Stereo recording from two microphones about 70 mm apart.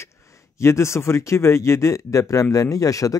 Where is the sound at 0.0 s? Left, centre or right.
Left.